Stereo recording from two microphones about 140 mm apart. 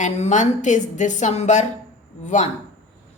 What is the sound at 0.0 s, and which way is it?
A woman's voice, 60° left (ahead or behind).